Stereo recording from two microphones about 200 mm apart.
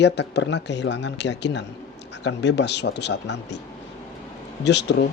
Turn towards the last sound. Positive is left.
turn(degrees=60)  # may be behind; listen again after turning